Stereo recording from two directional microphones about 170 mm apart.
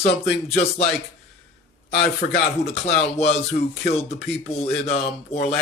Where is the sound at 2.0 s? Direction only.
40° left (ahead or behind).